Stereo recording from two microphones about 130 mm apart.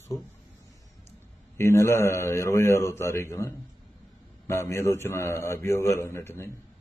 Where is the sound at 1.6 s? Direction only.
20° left (ahead or behind).